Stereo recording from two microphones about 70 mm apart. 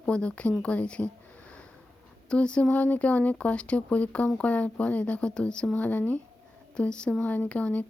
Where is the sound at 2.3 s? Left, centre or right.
Centre.